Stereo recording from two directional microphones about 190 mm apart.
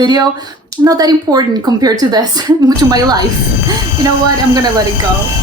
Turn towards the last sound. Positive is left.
turn(degrees=-20)  # may be behind; listen again after turning